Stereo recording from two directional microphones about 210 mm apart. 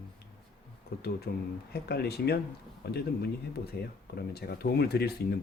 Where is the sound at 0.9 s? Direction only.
45° left (ahead or behind).